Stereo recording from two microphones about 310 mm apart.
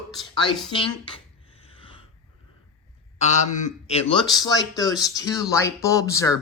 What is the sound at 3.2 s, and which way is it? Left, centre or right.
Speech, left.